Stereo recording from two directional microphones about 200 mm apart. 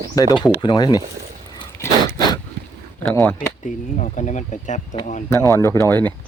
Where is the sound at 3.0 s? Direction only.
10° left (ahead or behind).